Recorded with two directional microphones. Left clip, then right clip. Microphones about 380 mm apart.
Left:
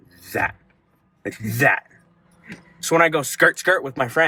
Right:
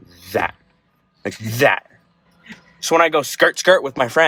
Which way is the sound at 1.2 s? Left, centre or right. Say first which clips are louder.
Right 3 dB; right.